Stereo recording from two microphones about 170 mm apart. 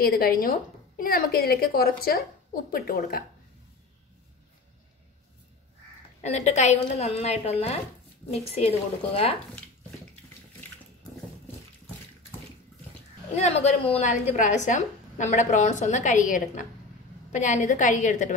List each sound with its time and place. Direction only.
0.0 s a woman's voice: 60° left (ahead or behind)
6.2 s a woman's voice: 40° left (ahead or behind)
13.3 s a woman's voice: 40° left (ahead or behind)